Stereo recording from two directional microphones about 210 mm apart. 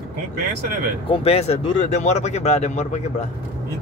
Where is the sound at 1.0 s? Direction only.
30° left (ahead or behind).